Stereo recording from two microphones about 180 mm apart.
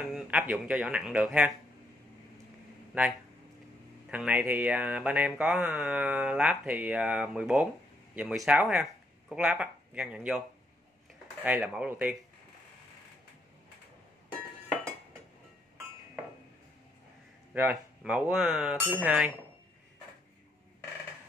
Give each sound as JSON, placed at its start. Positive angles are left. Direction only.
{"t": 0.0, "sound": "mantra", "side_deg": -5}
{"t": 4.1, "sound": "mantra", "side_deg": -10}
{"t": 9.3, "sound": "speech", "side_deg": -5}
{"t": 11.4, "sound": "mantra", "side_deg": -5}
{"t": 17.6, "sound": "mantra", "side_deg": -10}